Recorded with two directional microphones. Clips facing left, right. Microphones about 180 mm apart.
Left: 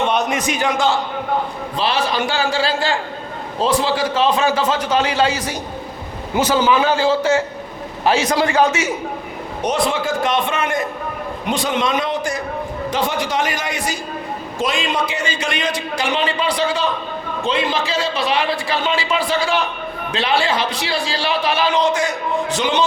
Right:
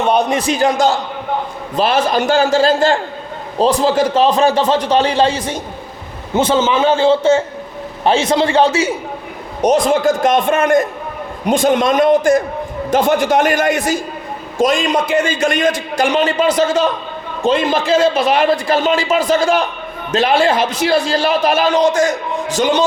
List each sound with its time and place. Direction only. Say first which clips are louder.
0.1 s a man's voice: right 5 dB; 35° right (ahead or behind)
9.6 s a man's voice: right 7 dB; 45° right (ahead or behind)